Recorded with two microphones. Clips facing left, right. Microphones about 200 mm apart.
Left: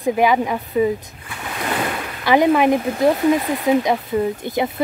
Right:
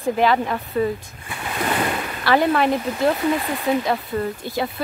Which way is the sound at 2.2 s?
15° left (ahead or behind).